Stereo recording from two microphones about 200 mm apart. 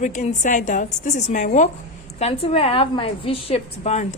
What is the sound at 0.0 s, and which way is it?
A woman's voice, 35° left (ahead or behind).